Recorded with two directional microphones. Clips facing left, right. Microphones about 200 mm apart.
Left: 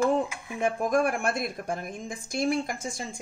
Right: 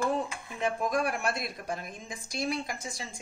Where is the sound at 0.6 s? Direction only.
50° left (ahead or behind).